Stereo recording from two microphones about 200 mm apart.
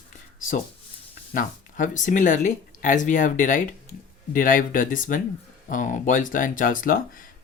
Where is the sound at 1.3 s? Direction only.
40° left (ahead or behind).